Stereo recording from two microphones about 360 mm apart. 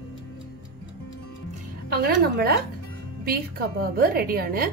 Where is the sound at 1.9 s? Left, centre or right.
Right.